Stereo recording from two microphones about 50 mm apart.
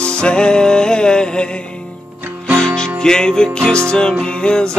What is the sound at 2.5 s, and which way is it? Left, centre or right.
Music, centre.